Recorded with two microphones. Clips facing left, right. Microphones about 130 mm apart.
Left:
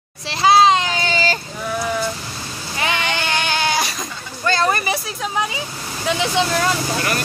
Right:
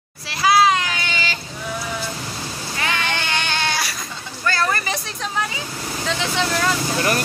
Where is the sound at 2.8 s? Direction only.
15° left (ahead or behind).